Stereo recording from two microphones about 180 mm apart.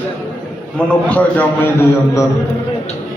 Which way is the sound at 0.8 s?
5° left (ahead or behind).